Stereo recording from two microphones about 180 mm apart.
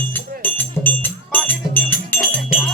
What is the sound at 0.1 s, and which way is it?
Music, 10° left (ahead or behind).